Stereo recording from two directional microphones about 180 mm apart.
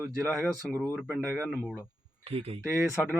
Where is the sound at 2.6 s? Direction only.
15° right (ahead or behind).